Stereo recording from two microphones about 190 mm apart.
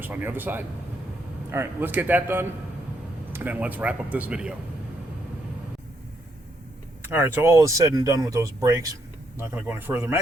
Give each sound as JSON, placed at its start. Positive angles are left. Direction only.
{"t": 0.0, "sound": "speech", "side_deg": -10}
{"t": 7.0, "sound": "speech", "side_deg": -10}